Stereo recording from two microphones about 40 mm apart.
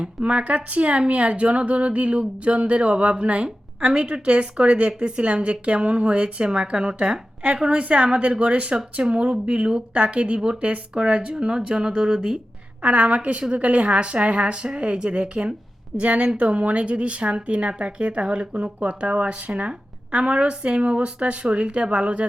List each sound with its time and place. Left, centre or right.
0.0 s speech: right
12.8 s a woman's voice: right